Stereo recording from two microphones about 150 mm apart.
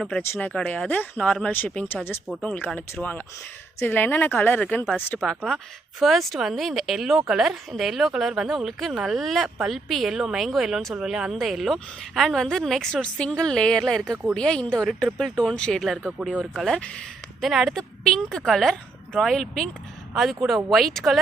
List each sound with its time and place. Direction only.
0.2 s speech: 10° left (ahead or behind)